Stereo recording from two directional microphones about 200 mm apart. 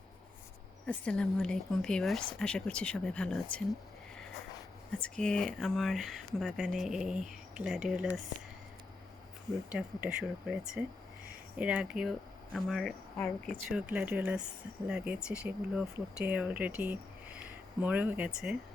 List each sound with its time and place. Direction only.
0.9 s speech: 5° left (ahead or behind)
4.9 s speech: 5° left (ahead or behind)
9.7 s speech: 5° right (ahead or behind)